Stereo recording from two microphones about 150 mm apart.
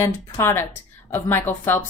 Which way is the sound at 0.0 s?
15° left (ahead or behind).